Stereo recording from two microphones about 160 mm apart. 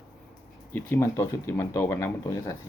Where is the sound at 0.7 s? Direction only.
15° left (ahead or behind).